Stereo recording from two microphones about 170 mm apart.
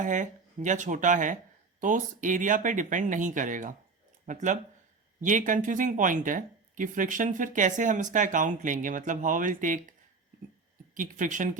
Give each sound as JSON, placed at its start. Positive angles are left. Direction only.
{"t": 0.0, "sound": "speech", "side_deg": -45}
{"t": 10.9, "sound": "speech", "side_deg": -50}